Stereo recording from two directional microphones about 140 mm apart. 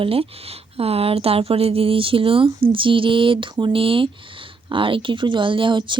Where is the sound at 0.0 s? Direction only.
45° right (ahead or behind).